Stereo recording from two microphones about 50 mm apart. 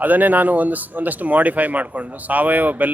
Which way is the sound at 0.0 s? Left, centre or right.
Right.